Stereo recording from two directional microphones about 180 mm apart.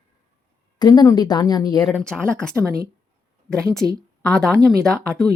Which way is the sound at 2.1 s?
5° left (ahead or behind).